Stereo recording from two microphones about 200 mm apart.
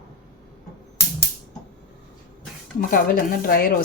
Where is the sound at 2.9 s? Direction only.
45° left (ahead or behind).